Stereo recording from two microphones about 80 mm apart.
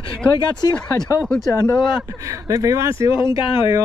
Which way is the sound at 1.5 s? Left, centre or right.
Left.